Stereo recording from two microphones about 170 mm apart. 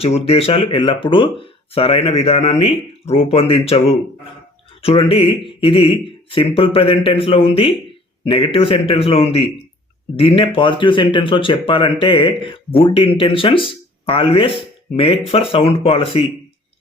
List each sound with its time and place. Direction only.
0.0 s speech: 35° left (ahead or behind)